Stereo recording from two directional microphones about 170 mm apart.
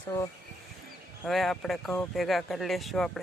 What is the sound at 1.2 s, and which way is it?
Speech, centre (ahead or behind).